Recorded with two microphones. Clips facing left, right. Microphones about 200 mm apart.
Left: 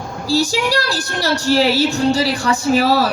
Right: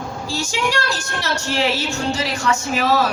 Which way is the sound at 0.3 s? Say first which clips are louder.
Left 7 dB; 35° left (ahead or behind).